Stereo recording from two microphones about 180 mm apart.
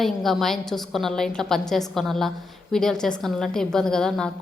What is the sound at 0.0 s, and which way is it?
A woman's voice, centre (ahead or behind).